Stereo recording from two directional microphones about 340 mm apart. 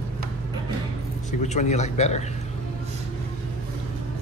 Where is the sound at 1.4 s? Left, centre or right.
Centre.